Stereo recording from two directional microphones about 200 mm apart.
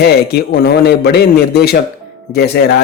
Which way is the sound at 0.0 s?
55° left (ahead or behind).